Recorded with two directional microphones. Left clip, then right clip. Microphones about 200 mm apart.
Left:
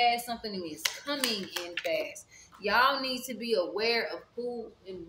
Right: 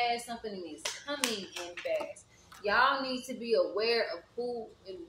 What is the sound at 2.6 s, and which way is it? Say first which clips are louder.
A woman's voice: left 2 dB; 30° left (ahead or behind).